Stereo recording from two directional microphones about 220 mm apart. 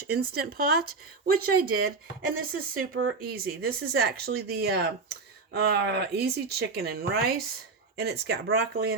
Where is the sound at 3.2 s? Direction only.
45° right (ahead or behind).